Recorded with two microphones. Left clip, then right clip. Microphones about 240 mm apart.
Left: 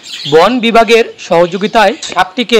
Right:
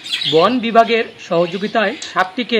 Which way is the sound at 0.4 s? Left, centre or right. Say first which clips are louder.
Left 5 dB; left.